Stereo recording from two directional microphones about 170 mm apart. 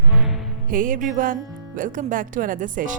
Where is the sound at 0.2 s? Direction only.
5° right (ahead or behind).